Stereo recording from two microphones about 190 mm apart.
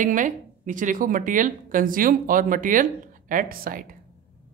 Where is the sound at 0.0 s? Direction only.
45° right (ahead or behind).